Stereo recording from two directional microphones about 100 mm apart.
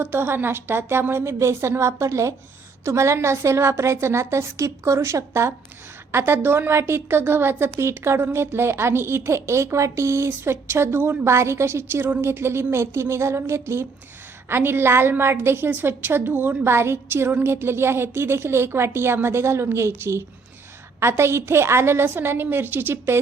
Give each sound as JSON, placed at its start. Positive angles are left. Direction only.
{"t": 0.0, "sound": "a woman's voice", "side_deg": -20}